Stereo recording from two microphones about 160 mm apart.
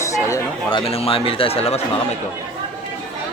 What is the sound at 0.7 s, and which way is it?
Speech, 35° left (ahead or behind).